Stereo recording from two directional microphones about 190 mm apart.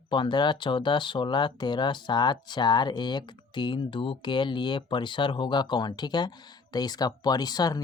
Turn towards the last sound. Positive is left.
turn(degrees=20)  # may be behind; listen again after turning